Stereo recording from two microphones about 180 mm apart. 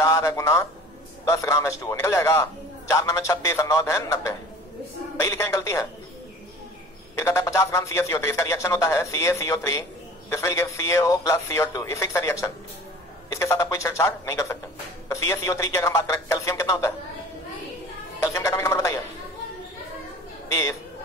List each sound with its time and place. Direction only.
0.0 s a man's voice: 15° left (ahead or behind)
7.2 s speech: 15° left (ahead or behind)
18.2 s speech: 15° left (ahead or behind)
20.4 s a woman's voice: 15° left (ahead or behind)